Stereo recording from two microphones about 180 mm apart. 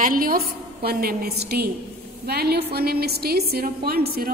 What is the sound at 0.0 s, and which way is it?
A woman's voice, 50° right (ahead or behind).